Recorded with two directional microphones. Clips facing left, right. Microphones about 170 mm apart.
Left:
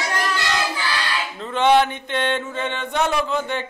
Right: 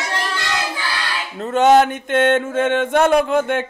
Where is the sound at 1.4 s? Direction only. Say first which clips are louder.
Right 4 dB; 45° right (ahead or behind).